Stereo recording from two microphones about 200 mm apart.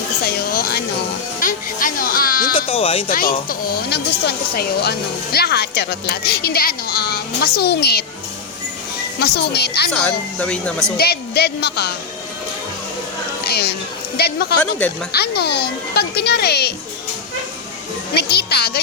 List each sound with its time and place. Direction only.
0.2 s a sound: 50° left (ahead or behind)
2.6 s speech: 30° left (ahead or behind)
3.1 s speech: 45° left (ahead or behind)
9.1 s speech: 55° left (ahead or behind)
9.9 s speech: 5° left (ahead or behind)
10.9 s speech: 50° left (ahead or behind)
13.4 s a sound: 50° left (ahead or behind)
14.2 s speech: 55° left (ahead or behind)
18.1 s speech: 55° left (ahead or behind)